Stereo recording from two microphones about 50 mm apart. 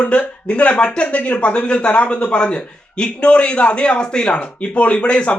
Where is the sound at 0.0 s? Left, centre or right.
Left.